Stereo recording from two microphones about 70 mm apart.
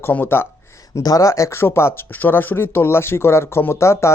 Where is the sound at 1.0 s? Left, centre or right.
Left.